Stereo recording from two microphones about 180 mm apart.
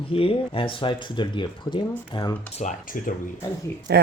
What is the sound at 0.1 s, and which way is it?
Speech, 30° left (ahead or behind).